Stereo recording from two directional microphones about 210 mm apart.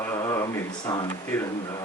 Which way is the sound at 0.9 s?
15° left (ahead or behind).